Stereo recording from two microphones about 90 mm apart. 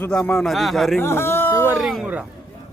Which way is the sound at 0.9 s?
25° left (ahead or behind).